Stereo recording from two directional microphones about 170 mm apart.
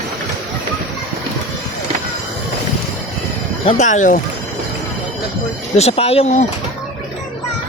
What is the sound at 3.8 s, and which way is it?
Speech, 45° left (ahead or behind).